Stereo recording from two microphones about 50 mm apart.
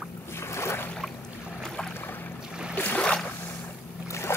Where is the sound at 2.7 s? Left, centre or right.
Left.